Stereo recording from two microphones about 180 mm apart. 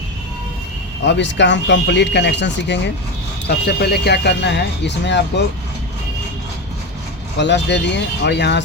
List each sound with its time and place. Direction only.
1.0 s speech: 75° left (ahead or behind)
3.4 s speech: 65° left (ahead or behind)
7.3 s speech: 75° left (ahead or behind)